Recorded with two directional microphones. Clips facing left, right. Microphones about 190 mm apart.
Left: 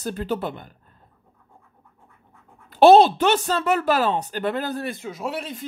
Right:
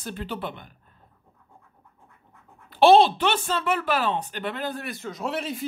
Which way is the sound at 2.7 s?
45° left (ahead or behind).